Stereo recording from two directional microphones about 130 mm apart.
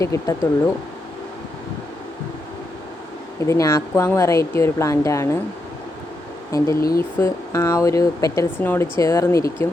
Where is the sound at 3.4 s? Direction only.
25° left (ahead or behind).